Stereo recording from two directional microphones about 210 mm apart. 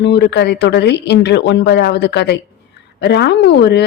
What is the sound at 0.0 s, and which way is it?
Speech, 55° left (ahead or behind).